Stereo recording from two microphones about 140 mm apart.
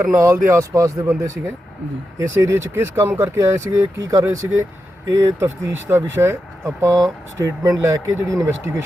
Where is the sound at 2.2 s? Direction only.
20° right (ahead or behind).